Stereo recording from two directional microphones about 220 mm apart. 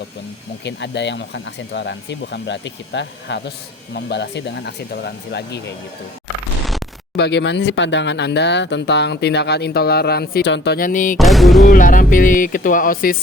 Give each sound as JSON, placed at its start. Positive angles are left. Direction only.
{"t": 0.6, "sound": "speech", "side_deg": 50}
{"t": 7.2, "sound": "speech", "side_deg": 50}
{"t": 11.2, "sound": "music", "side_deg": 0}
{"t": 11.6, "sound": "music", "side_deg": 35}